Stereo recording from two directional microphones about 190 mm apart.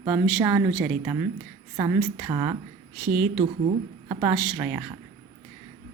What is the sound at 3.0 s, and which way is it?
A woman's voice, 5° right (ahead or behind).